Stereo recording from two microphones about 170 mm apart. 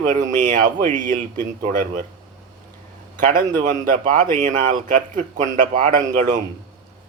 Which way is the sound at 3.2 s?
50° right (ahead or behind).